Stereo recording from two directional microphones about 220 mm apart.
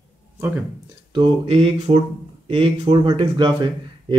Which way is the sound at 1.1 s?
25° right (ahead or behind).